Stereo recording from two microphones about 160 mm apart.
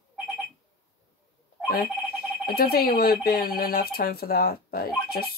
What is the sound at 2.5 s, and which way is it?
Music, 70° left (ahead or behind).